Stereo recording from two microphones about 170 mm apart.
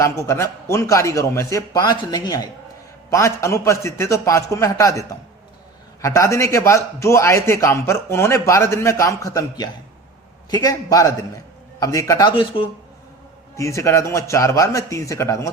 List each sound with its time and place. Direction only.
0.0 s a man's voice: 15° left (ahead or behind)
13.6 s a man's voice: 15° left (ahead or behind)